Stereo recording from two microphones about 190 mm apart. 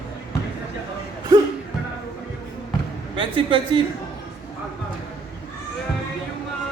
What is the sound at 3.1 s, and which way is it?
Speech, 25° right (ahead or behind).